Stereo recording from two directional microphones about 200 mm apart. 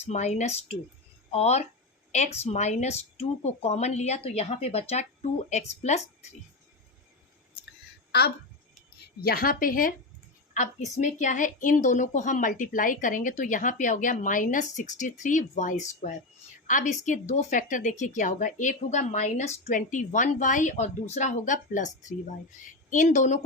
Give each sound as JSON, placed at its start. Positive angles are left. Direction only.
{"t": 0.0, "sound": "a woman's voice", "side_deg": 35}
{"t": 8.1, "sound": "a woman's voice", "side_deg": 55}